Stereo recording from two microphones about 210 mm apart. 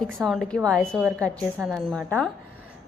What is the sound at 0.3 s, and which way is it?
A woman's voice, centre (ahead or behind).